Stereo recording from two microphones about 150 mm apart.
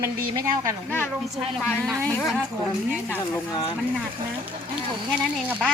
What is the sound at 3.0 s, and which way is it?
Speech, 15° left (ahead or behind).